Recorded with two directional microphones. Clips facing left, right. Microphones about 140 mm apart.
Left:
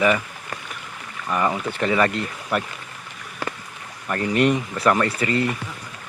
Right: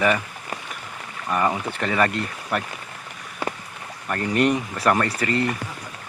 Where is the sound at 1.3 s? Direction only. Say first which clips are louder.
Even; 10° right (ahead or behind).